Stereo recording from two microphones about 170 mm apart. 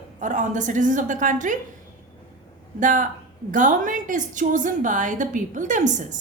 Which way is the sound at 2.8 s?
50° right (ahead or behind).